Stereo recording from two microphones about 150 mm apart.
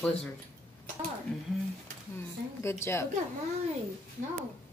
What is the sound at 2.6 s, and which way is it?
Speech, 15° left (ahead or behind).